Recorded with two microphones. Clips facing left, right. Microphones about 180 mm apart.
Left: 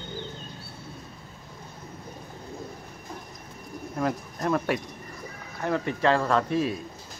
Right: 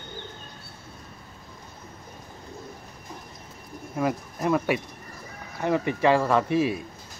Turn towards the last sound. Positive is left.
turn(degrees=-10)  # may be behind; listen again after turning